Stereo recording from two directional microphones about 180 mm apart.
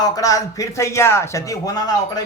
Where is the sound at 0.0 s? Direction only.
20° left (ahead or behind).